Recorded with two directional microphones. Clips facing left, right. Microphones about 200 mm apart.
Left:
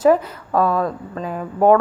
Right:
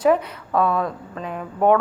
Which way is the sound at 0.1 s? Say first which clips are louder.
Left 3 dB; centre (ahead or behind).